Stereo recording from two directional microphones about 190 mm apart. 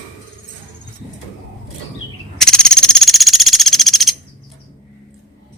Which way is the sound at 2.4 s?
5° left (ahead or behind).